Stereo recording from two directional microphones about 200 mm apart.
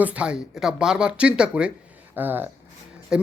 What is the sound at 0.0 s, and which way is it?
Speech, 5° right (ahead or behind).